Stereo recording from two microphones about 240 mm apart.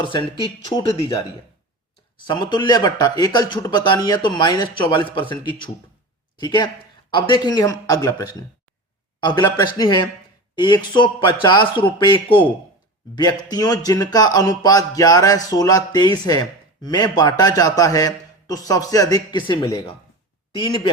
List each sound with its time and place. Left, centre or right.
0.0 s speech: centre
2.2 s speech: centre